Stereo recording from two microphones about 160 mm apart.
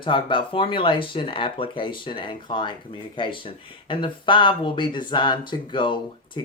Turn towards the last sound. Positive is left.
turn(degrees=30)  # may be behind; listen again after turning